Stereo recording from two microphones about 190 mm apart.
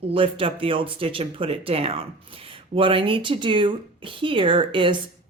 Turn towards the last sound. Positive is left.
turn(degrees=-25)  # may be behind; listen again after turning